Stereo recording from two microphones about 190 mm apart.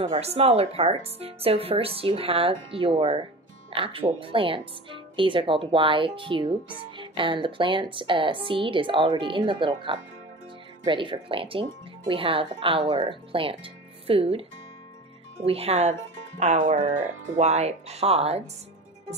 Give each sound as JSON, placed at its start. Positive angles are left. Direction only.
{"t": 0.0, "sound": "a woman's voice", "side_deg": -35}
{"t": 15.4, "sound": "speech", "side_deg": -30}